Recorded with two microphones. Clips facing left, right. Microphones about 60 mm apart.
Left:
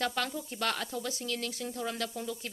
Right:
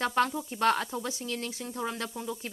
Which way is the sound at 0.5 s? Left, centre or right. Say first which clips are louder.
Right 7 dB; right.